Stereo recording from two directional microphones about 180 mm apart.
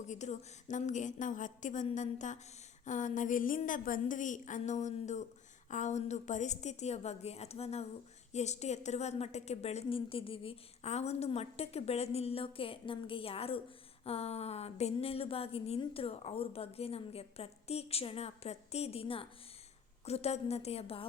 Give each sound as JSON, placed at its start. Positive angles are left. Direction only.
{"t": 0.1, "sound": "a woman's voice", "side_deg": 40}